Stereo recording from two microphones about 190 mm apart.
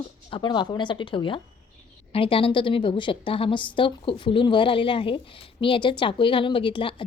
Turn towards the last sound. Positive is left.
turn(degrees=25)  # may be behind; listen again after turning